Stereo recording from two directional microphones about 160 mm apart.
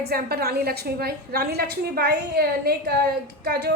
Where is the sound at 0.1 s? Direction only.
75° right (ahead or behind).